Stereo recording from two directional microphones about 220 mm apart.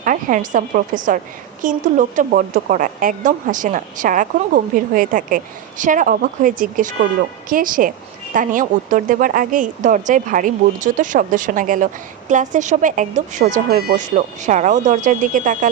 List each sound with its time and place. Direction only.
0.0 s a woman's voice: 35° right (ahead or behind)